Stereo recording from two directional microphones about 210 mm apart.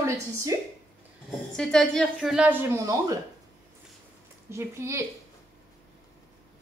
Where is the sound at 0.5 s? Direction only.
15° right (ahead or behind).